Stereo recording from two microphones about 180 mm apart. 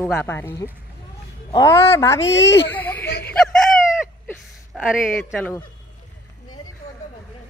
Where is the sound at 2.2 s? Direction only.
85° left.